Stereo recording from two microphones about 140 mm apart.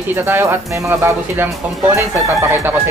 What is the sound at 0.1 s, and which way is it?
Speech, 15° right (ahead or behind).